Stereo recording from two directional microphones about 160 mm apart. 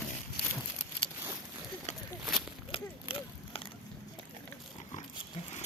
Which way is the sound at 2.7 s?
35° left (ahead or behind).